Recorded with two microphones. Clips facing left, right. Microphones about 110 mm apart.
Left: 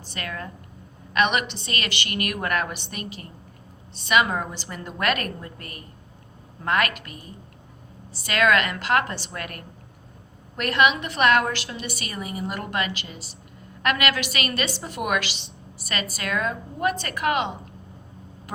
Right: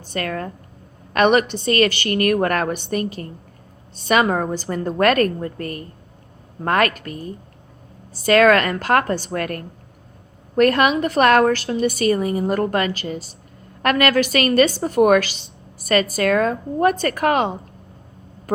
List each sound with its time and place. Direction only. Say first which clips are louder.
0.1 s a woman's voice: right 9 dB; 45° right (ahead or behind)